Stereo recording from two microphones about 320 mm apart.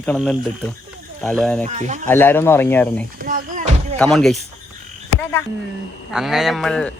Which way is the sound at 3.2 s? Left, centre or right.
Right.